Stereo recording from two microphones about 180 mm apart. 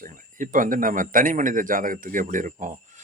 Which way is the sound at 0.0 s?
45° right (ahead or behind).